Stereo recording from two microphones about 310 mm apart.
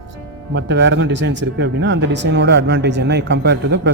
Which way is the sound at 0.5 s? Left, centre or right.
Right.